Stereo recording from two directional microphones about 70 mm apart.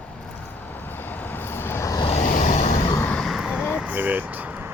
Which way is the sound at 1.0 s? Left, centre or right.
Left.